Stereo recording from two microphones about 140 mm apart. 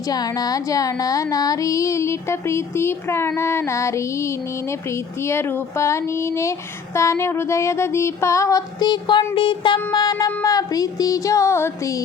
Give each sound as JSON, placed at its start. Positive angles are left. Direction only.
{"t": 0.1, "sound": "music", "side_deg": 25}